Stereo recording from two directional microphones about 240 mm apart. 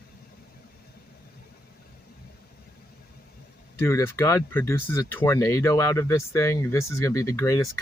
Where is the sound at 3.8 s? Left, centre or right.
Centre.